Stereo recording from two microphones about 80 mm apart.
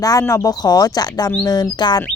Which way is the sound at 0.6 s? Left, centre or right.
Left.